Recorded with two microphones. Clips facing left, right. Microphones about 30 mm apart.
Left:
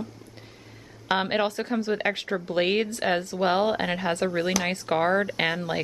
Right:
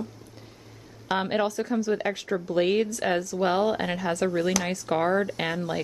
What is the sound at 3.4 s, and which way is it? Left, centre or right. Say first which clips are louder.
Speech: left 1 dB; left.